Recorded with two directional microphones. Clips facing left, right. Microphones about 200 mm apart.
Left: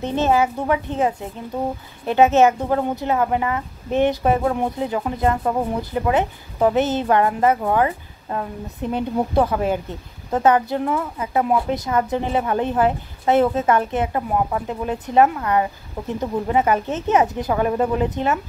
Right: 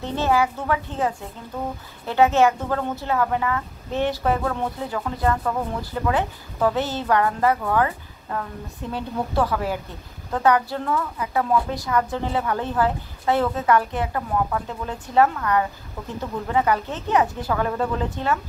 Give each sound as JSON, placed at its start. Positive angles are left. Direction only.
{"t": 0.0, "sound": "a woman's voice", "side_deg": 20}